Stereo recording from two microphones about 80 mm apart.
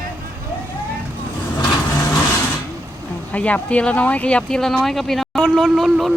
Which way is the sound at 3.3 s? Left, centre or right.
Centre.